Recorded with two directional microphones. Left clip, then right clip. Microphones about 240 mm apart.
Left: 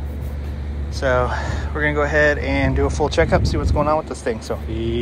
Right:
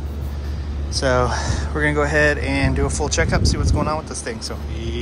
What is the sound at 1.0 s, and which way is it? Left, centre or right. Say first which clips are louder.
Speech: even; centre.